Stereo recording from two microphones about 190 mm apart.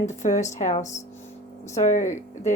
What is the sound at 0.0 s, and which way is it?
A woman's voice, 40° left (ahead or behind).